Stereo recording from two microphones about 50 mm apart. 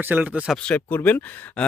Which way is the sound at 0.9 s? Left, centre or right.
Left.